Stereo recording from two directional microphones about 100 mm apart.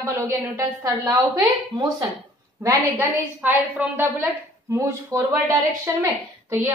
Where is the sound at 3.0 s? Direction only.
15° right (ahead or behind).